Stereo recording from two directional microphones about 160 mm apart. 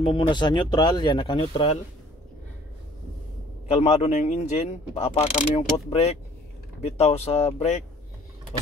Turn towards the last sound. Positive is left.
turn(degrees=45)  # may be behind; listen again after turning